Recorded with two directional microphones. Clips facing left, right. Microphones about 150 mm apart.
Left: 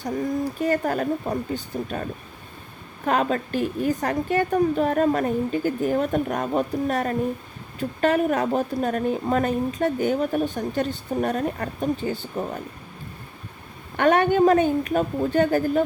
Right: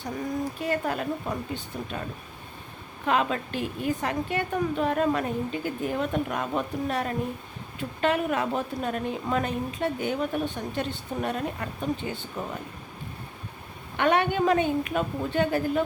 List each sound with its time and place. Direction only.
0.6 s a woman's voice: 45° left (ahead or behind)
3.1 s a woman's voice: 45° left (ahead or behind)
13.9 s a woman's voice: 45° left (ahead or behind)